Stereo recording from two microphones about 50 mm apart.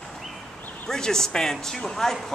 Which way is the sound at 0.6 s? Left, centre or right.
Left.